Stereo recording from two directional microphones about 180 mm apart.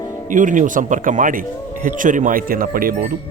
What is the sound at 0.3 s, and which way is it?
Speech, 45° right (ahead or behind).